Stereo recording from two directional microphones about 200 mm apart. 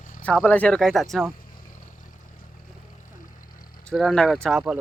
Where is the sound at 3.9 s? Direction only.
Centre (ahead or behind).